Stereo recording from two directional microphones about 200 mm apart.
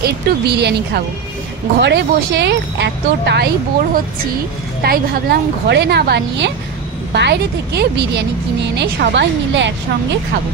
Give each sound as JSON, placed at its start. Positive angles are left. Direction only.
{"t": 0.0, "sound": "speech", "side_deg": -55}
{"t": 4.8, "sound": "speech", "side_deg": -50}